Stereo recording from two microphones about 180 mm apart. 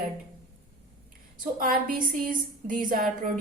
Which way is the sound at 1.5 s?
50° right (ahead or behind).